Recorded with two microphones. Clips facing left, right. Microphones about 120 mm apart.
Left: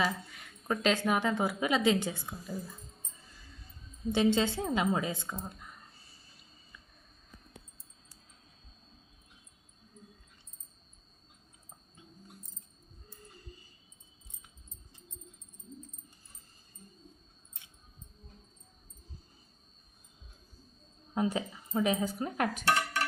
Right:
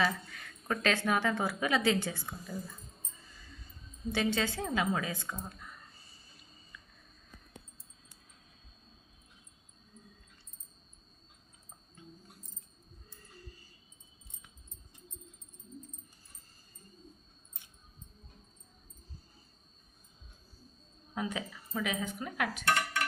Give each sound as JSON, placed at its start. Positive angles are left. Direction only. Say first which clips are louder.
{"t": 0.0, "sound": "a woman's voice", "louder": "even", "side_deg": 10}
{"t": 2.3, "sound": "speech", "louder": "left 1 dB", "side_deg": 0}
{"t": 3.3, "sound": "a sound", "louder": "right 1 dB", "side_deg": 0}
{"t": 4.1, "sound": "a woman's voice", "louder": "left 5 dB", "side_deg": 20}
{"t": 21.2, "sound": "speech", "louder": "left 5 dB", "side_deg": 35}
{"t": 21.5, "sound": "a sound", "louder": "left 5 dB", "side_deg": 25}
{"t": 21.8, "sound": "cutlery", "louder": "left 5 dB", "side_deg": 35}